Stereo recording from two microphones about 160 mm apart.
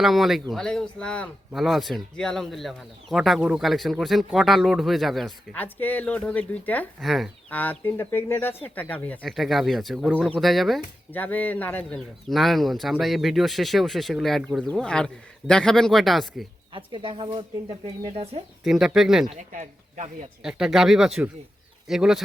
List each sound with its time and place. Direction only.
0.0 s speech: centre (ahead or behind)
7.6 s speech: 10° left (ahead or behind)
16.7 s speech: 35° right (ahead or behind)
18.1 s speech: 40° right (ahead or behind)
18.6 s speech: centre (ahead or behind)
20.4 s speech: 5° right (ahead or behind)